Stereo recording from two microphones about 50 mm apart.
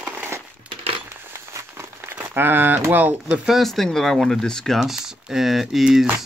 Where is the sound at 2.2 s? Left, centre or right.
Right.